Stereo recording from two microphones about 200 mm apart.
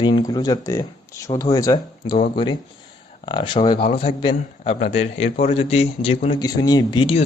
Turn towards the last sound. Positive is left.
turn(degrees=25)  # may be behind; listen again after turning